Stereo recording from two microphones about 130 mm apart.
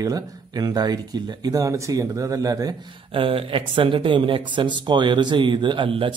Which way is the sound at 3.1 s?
45° right (ahead or behind).